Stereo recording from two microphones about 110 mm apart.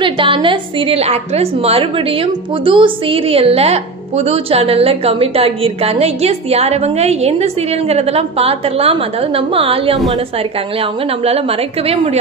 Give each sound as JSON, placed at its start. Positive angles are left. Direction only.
{"t": 0.0, "sound": "a woman's voice", "side_deg": -50}
{"t": 2.6, "sound": "a woman's voice", "side_deg": -50}
{"t": 11.9, "sound": "a woman's voice", "side_deg": -60}